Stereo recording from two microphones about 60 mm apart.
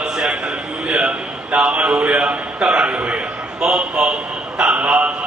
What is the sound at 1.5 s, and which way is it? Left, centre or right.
A man's voice, right.